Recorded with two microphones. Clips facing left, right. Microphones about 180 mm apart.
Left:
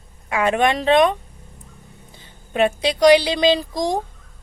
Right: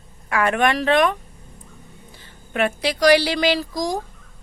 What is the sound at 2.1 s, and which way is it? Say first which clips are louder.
Speech: left 3 dB; 20° left (ahead or behind).